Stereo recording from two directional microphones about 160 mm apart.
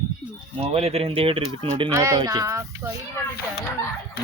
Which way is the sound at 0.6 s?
40° right (ahead or behind).